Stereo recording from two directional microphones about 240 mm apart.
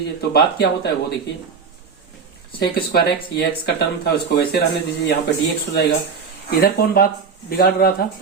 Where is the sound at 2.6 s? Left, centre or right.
Left.